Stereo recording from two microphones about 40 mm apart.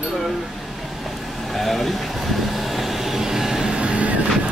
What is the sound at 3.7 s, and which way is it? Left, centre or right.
Vehicle, right.